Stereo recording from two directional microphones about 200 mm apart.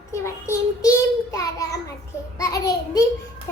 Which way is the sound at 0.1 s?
15° left (ahead or behind).